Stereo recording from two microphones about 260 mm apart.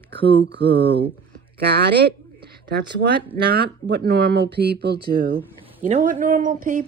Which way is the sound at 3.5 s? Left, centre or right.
Right.